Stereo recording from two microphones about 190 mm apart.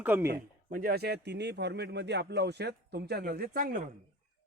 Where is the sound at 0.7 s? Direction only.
50° right (ahead or behind).